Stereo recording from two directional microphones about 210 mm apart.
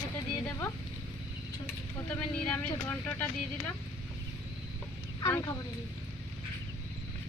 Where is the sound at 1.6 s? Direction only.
5° left (ahead or behind).